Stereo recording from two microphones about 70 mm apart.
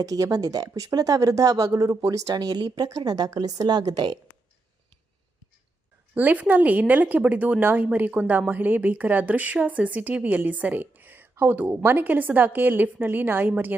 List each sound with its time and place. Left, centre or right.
0.0 s a woman's voice: right
6.1 s speech: right